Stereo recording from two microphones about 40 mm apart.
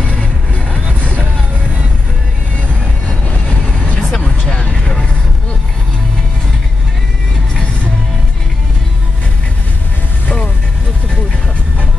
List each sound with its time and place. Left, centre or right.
0.1 s music: left
4.1 s vehicle: left